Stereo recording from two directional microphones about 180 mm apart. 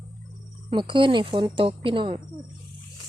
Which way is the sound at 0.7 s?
25° right (ahead or behind).